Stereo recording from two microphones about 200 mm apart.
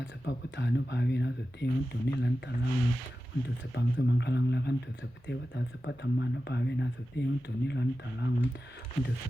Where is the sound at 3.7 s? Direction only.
55° left (ahead or behind).